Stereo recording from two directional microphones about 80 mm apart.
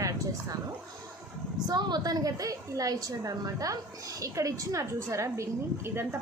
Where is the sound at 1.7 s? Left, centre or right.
Right.